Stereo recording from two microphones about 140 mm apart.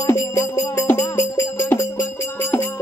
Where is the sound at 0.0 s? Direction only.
20° left (ahead or behind).